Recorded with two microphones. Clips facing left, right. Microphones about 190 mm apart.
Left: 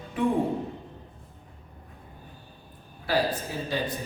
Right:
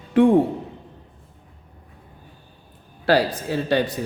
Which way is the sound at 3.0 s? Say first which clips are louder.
Right 7 dB; 80° right.